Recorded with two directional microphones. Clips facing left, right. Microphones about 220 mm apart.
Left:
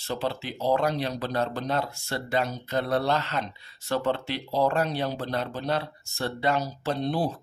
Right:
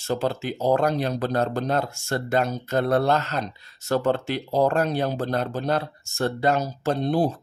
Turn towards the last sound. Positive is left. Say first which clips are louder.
# right 5 dB
turn(degrees=-45)  # may be behind; listen again after turning